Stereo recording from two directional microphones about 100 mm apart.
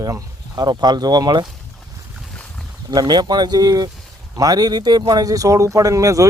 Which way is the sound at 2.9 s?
45° right (ahead or behind).